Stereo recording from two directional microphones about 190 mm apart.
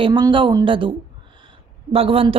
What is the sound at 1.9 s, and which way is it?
Speech, 30° right (ahead or behind).